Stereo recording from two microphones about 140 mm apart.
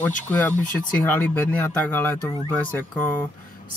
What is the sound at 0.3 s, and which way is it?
Speech, 10° left (ahead or behind).